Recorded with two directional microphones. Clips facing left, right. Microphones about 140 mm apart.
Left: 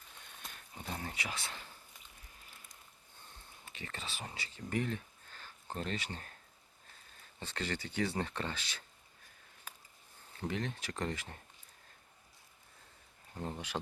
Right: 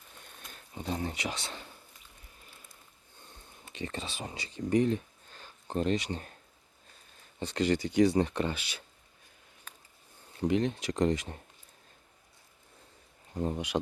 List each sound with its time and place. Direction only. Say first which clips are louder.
0.8 s speech: right 8 dB; 20° right (ahead or behind)
3.7 s speech: right 8 dB; 20° right (ahead or behind)
7.3 s speech: right 11 dB; 15° right (ahead or behind)
9.7 s a sound: left 1 dB; 10° left (ahead or behind)
10.3 s speech: right 10 dB; 20° right (ahead or behind)
13.4 s speech: right 9 dB; 15° right (ahead or behind)